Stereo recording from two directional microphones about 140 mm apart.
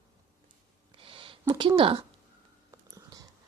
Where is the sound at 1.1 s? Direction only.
40° right (ahead or behind).